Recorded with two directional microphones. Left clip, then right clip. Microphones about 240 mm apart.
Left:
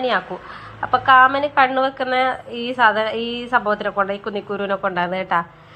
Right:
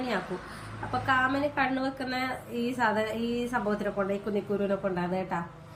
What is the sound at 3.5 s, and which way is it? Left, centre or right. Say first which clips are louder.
Speech: left 14 dB; left.